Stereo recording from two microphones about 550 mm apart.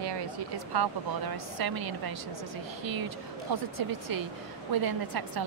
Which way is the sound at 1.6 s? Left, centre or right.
Right.